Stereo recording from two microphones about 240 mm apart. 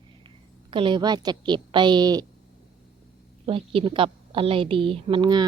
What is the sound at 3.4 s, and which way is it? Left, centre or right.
A woman's voice, right.